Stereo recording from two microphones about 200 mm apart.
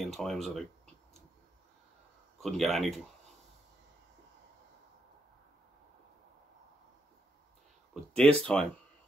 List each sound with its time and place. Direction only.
0.0 s speech: centre (ahead or behind)
2.4 s speech: centre (ahead or behind)
7.9 s speech: 5° left (ahead or behind)